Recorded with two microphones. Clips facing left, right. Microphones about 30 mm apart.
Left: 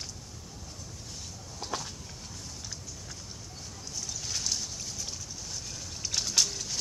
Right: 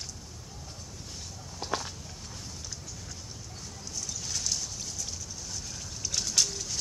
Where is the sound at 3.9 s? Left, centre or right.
Centre.